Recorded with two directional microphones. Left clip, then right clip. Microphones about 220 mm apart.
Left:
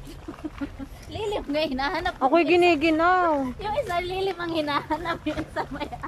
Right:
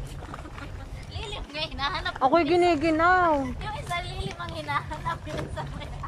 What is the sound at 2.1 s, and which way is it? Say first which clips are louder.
Speech: left 1 dB; 5° left (ahead or behind).